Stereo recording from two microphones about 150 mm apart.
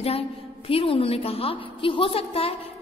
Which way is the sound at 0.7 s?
40° left (ahead or behind).